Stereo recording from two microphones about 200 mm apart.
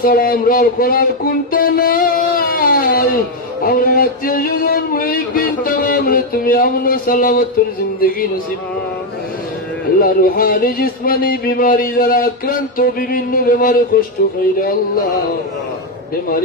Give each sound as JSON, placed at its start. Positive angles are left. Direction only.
{"t": 0.0, "sound": "speech", "side_deg": 45}
{"t": 9.9, "sound": "speech", "side_deg": 45}